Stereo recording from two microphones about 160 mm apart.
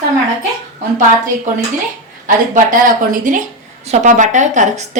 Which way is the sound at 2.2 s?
55° right (ahead or behind).